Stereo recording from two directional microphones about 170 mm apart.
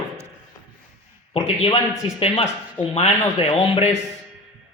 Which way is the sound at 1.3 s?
35° left (ahead or behind).